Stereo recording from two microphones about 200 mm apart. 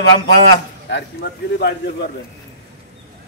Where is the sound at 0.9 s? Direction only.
60° left (ahead or behind).